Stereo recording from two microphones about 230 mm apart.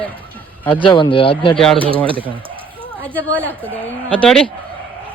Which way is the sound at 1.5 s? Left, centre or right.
Centre.